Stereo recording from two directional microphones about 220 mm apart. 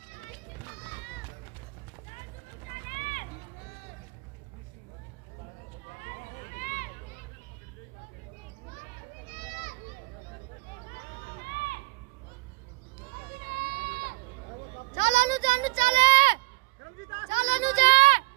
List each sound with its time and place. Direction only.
2.9 s run: 35° left (ahead or behind)
6.5 s a sound: 35° left (ahead or behind)
9.3 s children playing: 40° right (ahead or behind)
11.4 s run: 45° left (ahead or behind)
13.5 s run: 45° right (ahead or behind)
15.0 s a sound: 20° right (ahead or behind)